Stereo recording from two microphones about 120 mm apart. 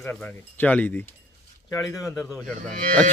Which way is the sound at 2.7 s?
90° right.